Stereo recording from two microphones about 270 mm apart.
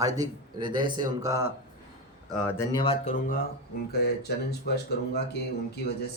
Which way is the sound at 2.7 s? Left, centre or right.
Centre.